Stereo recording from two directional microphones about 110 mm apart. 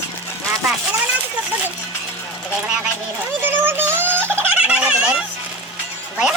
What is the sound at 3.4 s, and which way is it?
Speech, 20° right (ahead or behind).